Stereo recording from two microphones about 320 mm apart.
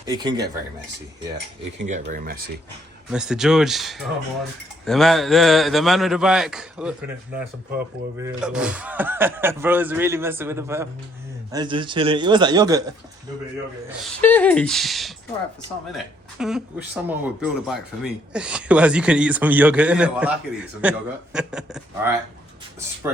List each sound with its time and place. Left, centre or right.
0.0 s speech: centre
1.8 s speech: right
3.1 s speech: centre
8.2 s speech: centre
14.2 s speech: centre
16.4 s speech: centre